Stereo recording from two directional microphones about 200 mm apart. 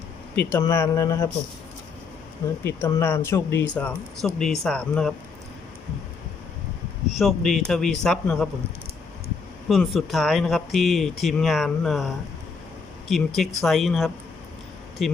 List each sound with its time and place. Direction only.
0.5 s speech: 15° left (ahead or behind)
2.6 s speech: 10° left (ahead or behind)
7.1 s speech: centre (ahead or behind)
9.6 s speech: centre (ahead or behind)